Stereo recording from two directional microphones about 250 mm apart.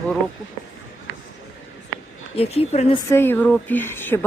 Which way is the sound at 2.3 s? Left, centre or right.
Left.